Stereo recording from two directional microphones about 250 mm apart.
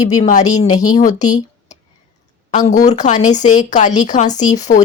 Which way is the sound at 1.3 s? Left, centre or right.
Centre.